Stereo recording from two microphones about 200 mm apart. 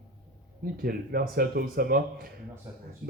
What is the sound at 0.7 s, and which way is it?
A man's voice, 50° right (ahead or behind).